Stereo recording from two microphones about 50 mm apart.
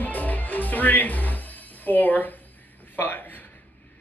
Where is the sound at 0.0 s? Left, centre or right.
Left.